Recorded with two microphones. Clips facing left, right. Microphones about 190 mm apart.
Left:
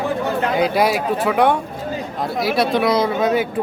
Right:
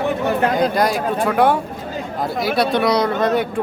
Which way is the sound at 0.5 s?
5° left (ahead or behind).